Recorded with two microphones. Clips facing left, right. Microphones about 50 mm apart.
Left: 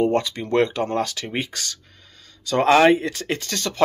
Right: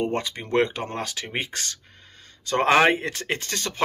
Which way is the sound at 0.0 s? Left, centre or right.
Right.